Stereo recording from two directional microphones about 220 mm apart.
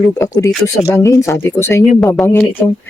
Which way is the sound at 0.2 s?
15° left (ahead or behind).